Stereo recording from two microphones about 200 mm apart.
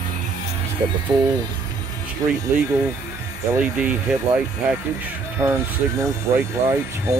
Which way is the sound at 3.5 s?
10° right (ahead or behind).